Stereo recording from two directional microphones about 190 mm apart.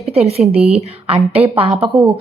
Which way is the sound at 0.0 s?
30° right (ahead or behind).